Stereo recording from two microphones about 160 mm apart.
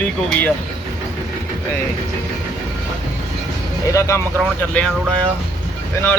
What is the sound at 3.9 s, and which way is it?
Speech, 20° left (ahead or behind).